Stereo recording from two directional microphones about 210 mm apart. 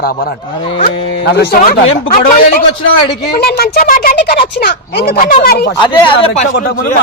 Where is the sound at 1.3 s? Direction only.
45° left (ahead or behind).